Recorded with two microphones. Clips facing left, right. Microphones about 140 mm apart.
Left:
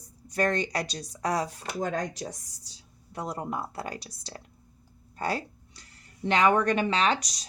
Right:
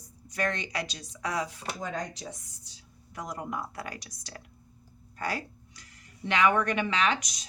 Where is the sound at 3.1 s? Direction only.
30° left (ahead or behind).